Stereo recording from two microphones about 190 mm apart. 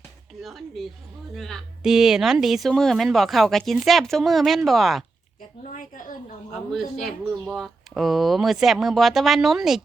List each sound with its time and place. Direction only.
0.4 s speech: centre (ahead or behind)
5.6 s a woman's voice: 45° left (ahead or behind)
6.5 s speech: centre (ahead or behind)